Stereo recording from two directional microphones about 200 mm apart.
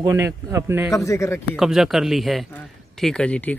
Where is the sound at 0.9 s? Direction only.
15° left (ahead or behind).